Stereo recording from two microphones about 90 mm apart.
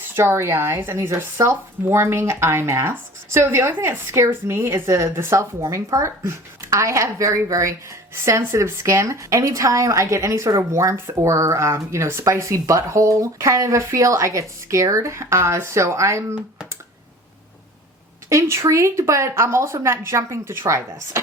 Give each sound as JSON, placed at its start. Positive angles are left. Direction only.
{"t": 0.1, "sound": "speech", "side_deg": -25}
{"t": 18.3, "sound": "speech", "side_deg": -35}